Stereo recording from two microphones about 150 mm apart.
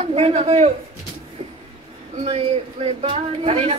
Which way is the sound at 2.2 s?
45° right (ahead or behind).